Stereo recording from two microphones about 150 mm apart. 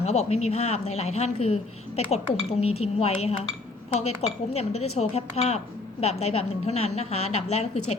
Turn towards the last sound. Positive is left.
turn(degrees=45)  # may be behind; listen again after turning